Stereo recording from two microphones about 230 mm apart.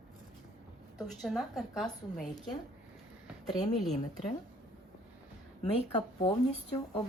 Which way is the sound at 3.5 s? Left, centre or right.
Centre.